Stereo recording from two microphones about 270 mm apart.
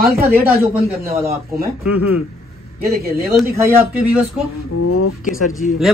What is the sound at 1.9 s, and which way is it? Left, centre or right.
Speech, left.